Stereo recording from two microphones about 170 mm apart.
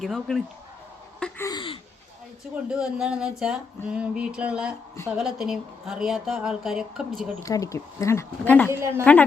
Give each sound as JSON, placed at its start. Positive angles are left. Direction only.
{"t": 0.0, "sound": "speech", "side_deg": 0}
{"t": 1.5, "sound": "speech", "side_deg": 30}
{"t": 2.6, "sound": "speech", "side_deg": -5}
{"t": 3.8, "sound": "a sound", "side_deg": -5}
{"t": 5.1, "sound": "speech", "side_deg": 0}
{"t": 7.3, "sound": "speech", "side_deg": 20}
{"t": 8.7, "sound": "a sound", "side_deg": -15}